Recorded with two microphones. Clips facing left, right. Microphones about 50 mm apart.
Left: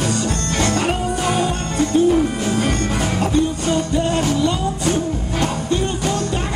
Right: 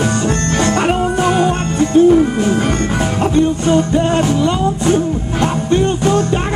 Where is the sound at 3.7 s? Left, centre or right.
Right.